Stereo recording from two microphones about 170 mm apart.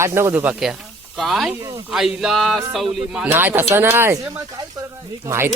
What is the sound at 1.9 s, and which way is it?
Speech, centre (ahead or behind).